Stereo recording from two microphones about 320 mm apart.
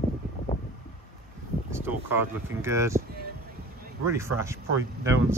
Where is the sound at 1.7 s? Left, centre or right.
Centre.